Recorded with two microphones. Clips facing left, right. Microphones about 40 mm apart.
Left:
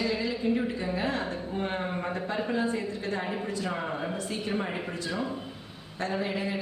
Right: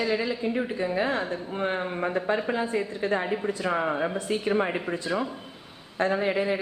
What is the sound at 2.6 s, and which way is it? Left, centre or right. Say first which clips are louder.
Speech: right 3 dB; right.